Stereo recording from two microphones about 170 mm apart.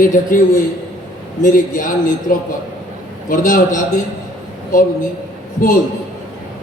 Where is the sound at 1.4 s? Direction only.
50° left (ahead or behind).